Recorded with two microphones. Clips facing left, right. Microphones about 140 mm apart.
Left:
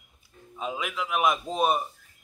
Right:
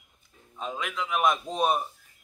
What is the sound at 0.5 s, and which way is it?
Speech, 5° left (ahead or behind).